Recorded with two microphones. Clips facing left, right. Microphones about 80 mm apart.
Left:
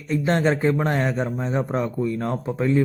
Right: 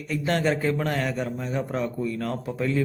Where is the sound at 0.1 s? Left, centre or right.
Left.